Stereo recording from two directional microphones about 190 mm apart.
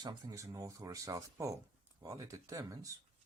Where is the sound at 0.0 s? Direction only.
20° right (ahead or behind).